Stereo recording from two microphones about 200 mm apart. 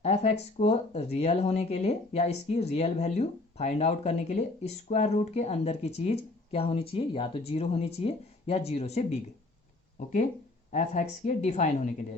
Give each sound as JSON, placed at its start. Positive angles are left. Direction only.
{"t": 0.0, "sound": "speech", "side_deg": 30}
{"t": 10.7, "sound": "speech", "side_deg": 35}